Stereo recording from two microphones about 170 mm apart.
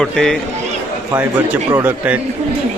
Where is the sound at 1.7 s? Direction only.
10° right (ahead or behind).